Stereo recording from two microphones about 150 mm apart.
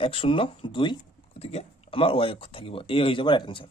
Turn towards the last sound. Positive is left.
turn(degrees=35)  # may be behind; listen again after turning